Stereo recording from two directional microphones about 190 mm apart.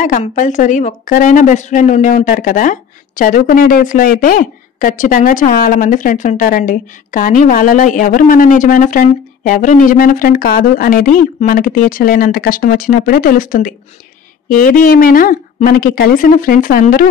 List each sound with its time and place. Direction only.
0.2 s a woman's voice: 40° left (ahead or behind)